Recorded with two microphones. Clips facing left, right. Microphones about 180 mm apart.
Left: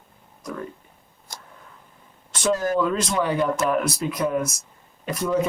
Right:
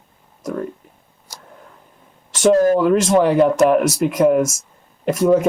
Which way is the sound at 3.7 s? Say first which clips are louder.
Right 8 dB; 85° right.